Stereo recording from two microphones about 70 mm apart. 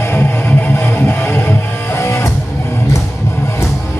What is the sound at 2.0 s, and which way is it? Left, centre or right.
Music, left.